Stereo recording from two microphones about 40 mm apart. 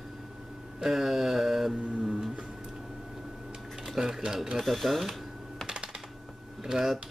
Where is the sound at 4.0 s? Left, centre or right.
Centre.